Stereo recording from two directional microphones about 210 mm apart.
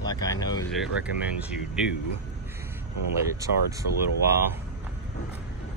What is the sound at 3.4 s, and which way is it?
Speech, 15° right (ahead or behind).